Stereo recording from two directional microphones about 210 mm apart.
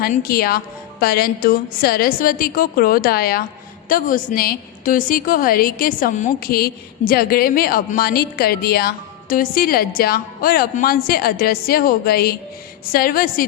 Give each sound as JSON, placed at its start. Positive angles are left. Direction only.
{"t": 0.0, "sound": "a woman's voice", "side_deg": 45}